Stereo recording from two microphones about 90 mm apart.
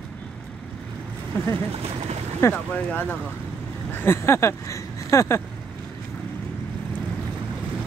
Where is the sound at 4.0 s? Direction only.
30° left (ahead or behind).